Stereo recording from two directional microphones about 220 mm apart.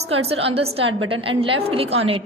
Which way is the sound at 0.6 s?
25° right (ahead or behind).